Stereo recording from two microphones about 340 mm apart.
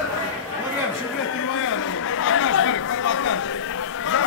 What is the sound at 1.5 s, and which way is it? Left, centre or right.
Chatter, left.